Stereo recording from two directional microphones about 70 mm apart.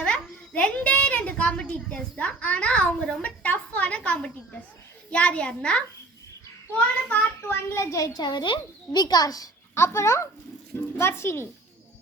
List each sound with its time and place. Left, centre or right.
0.0 s a sound: centre
5.1 s a child's voice: centre
7.8 s a child's voice: left
9.7 s speech: left